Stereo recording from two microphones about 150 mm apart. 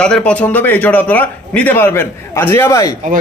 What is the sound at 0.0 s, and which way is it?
A man's voice, 5° left (ahead or behind).